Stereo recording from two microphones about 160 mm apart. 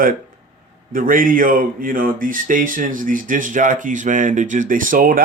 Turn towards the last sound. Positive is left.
turn(degrees=-60)  # may be behind; listen again after turning